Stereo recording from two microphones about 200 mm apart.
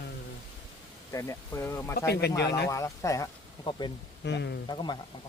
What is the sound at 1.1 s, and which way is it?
Speech, 15° left (ahead or behind).